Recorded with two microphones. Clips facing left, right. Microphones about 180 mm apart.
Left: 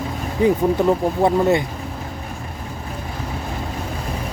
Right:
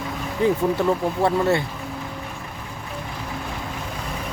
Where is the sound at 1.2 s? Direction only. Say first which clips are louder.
Left 3 dB; 15° left (ahead or behind).